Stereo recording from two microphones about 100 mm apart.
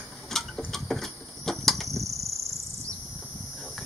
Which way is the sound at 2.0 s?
30° right (ahead or behind).